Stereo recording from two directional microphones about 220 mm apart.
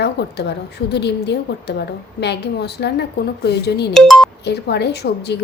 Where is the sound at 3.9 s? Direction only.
Centre (ahead or behind).